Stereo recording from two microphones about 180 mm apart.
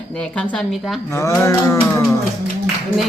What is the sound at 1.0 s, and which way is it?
Music, 15° left (ahead or behind).